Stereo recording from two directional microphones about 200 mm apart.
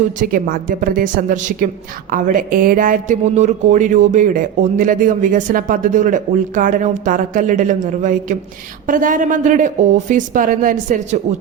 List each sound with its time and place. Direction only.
0.2 s a woman's voice: 45° right (ahead or behind)